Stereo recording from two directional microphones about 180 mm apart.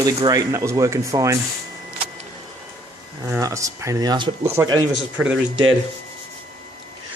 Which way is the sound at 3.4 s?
20° right (ahead or behind).